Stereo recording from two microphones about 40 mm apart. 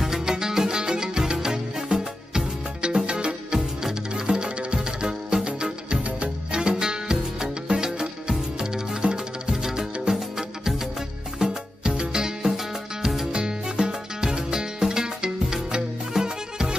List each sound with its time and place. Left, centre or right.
0.0 s music: centre; by 6.3 s right
6.5 s music: centre
13.3 s music: right